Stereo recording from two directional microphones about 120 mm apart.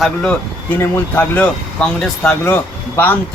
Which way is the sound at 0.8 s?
15° left (ahead or behind).